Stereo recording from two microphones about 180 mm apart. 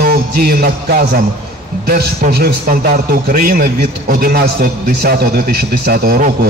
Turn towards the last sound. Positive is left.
turn(degrees=-50)  # may be behind; listen again after turning